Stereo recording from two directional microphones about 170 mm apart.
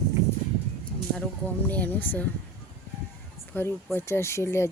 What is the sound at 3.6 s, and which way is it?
Speech, 15° left (ahead or behind).